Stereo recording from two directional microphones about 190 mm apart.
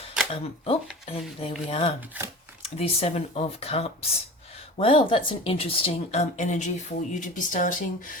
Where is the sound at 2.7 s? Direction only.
30° left (ahead or behind).